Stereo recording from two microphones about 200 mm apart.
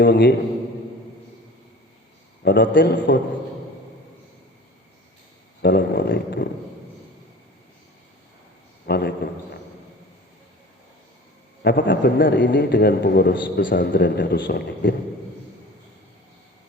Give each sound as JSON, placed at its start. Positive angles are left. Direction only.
{"t": 0.0, "sound": "a man's voice", "side_deg": 55}
{"t": 2.4, "sound": "a man's voice", "side_deg": 55}
{"t": 5.6, "sound": "speech", "side_deg": 55}
{"t": 8.9, "sound": "speech", "side_deg": 55}
{"t": 11.6, "sound": "a man's voice", "side_deg": 60}